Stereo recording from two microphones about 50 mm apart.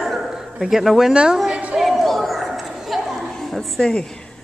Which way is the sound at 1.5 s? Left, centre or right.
Right.